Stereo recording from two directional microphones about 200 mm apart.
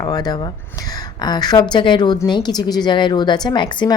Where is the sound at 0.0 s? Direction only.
20° left (ahead or behind).